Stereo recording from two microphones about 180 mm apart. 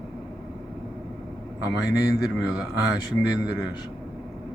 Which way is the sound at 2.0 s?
20° left (ahead or behind).